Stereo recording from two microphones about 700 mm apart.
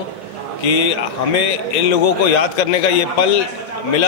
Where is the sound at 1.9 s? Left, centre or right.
Left.